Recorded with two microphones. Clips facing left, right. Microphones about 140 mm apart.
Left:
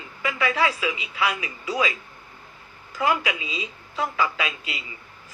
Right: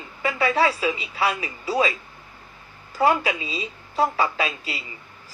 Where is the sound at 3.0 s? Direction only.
30° right (ahead or behind).